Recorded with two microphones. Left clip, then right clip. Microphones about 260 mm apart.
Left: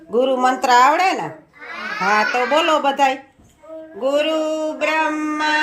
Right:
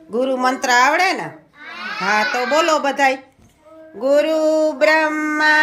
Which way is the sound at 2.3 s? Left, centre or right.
Centre.